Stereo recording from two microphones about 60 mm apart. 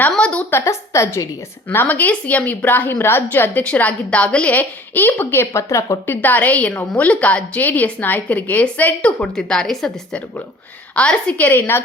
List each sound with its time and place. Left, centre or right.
0.2 s a sound: centre
0.5 s a woman's voice: left
1.6 s a woman's voice: left
4.5 s a woman's voice: left
5.5 s a woman's voice: left
6.1 s a woman's voice: left; by 9.9 s centre
10.9 s a woman's voice: centre
11.4 s a woman's voice: left